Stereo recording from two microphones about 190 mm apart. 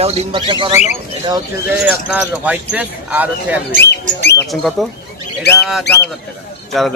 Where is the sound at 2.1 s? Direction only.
5° right (ahead or behind).